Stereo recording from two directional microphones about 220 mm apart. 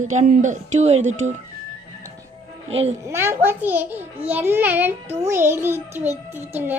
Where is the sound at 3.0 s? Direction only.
10° right (ahead or behind).